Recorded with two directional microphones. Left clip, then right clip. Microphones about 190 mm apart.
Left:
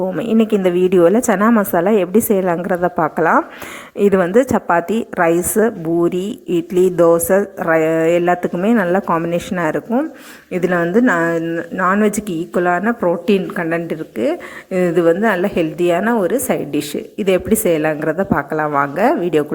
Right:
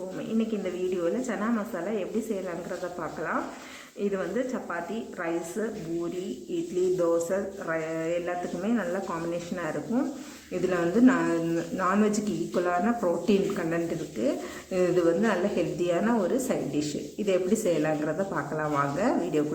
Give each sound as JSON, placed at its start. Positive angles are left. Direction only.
{"t": 0.2, "sound": "a woman's voice", "side_deg": 55}
{"t": 6.9, "sound": "a woman's voice", "side_deg": 50}